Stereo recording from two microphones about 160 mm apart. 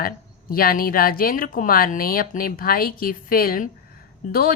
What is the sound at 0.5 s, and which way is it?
A woman's voice, 65° left (ahead or behind).